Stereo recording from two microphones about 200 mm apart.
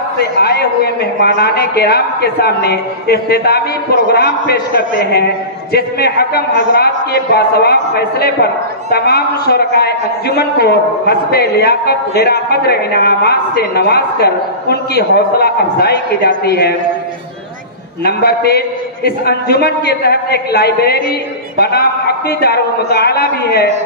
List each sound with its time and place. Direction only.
0.2 s a man's voice: 55° left (ahead or behind)
18.0 s a man's voice: 50° left (ahead or behind)